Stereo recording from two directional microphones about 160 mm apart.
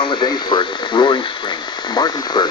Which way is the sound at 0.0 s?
30° left (ahead or behind).